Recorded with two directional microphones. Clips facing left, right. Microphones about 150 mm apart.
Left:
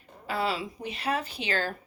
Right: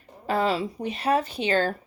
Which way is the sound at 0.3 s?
40° right (ahead or behind).